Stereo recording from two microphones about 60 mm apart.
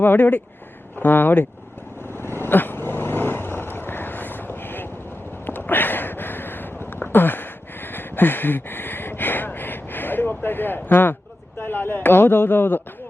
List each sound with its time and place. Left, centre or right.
0.0 s speech: left
2.1 s vehicle: left
5.5 s a sound: left